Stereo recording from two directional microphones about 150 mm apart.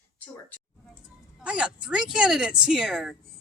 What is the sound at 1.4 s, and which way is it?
Speech, 10° right (ahead or behind).